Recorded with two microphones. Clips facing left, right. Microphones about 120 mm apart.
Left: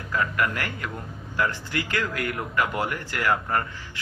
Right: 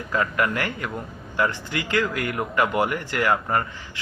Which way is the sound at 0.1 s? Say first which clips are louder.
Right 2 dB; 25° right (ahead or behind).